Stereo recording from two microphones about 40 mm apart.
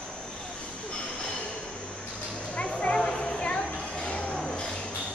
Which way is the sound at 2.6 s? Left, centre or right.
Left.